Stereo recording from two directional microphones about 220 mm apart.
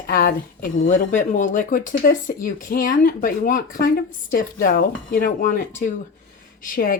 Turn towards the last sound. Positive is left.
turn(degrees=40)  # may be behind; listen again after turning